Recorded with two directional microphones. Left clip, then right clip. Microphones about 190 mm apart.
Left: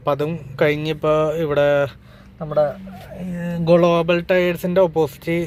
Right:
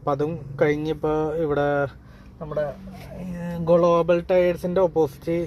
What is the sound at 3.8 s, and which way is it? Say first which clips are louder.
Speech: left 2 dB; 5° left (ahead or behind).